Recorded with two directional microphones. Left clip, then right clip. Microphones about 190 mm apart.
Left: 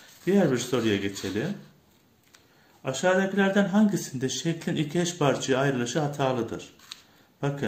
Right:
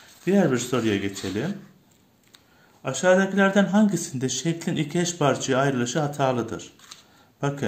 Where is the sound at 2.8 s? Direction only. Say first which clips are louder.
Right 4 dB; 20° right (ahead or behind).